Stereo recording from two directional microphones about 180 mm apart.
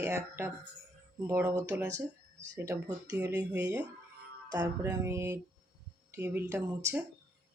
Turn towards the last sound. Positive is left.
turn(degrees=-15)  # may be behind; listen again after turning